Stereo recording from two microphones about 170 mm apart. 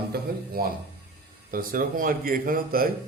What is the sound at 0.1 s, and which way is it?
A man's voice, 60° right (ahead or behind).